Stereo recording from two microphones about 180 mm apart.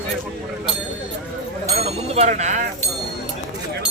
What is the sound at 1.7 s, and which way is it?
Speech, 35° right (ahead or behind).